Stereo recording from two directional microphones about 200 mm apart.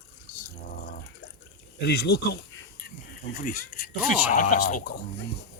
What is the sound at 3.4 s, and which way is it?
Speech, 45° left (ahead or behind).